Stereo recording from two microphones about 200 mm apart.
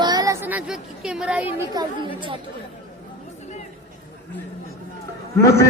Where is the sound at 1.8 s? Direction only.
20° right (ahead or behind).